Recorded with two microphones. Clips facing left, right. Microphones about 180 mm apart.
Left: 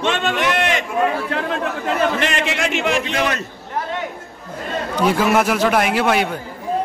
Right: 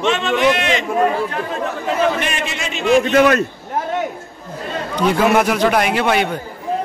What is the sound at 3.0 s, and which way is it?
Speech, 50° right (ahead or behind).